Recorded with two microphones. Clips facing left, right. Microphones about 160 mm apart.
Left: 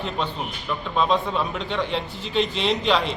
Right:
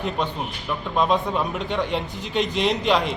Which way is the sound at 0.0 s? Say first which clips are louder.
Right 2 dB; 15° right (ahead or behind).